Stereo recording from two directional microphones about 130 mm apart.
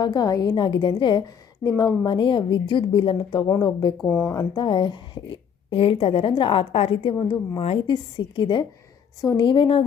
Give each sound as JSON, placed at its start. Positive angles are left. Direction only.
{"t": 0.0, "sound": "a woman's voice", "side_deg": 30}
{"t": 4.0, "sound": "speech", "side_deg": 15}
{"t": 4.4, "sound": "a woman's voice", "side_deg": 35}
{"t": 9.2, "sound": "a woman's voice", "side_deg": 25}
{"t": 9.5, "sound": "a woman's voice", "side_deg": 40}